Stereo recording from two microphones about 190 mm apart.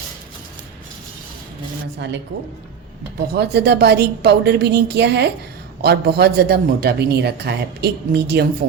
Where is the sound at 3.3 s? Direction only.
60° right (ahead or behind).